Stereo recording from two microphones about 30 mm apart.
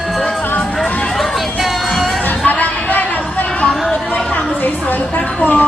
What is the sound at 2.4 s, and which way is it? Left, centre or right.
Chatter, left.